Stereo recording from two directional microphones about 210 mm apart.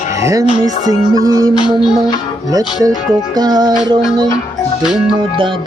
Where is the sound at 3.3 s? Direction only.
20° right (ahead or behind).